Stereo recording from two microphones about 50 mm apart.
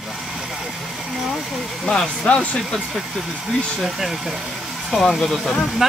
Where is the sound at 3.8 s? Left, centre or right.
Centre.